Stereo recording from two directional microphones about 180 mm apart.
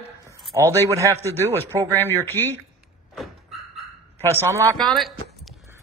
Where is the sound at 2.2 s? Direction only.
15° left (ahead or behind).